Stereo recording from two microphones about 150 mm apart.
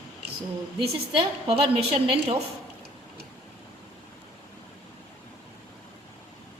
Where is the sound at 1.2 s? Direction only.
40° right (ahead or behind).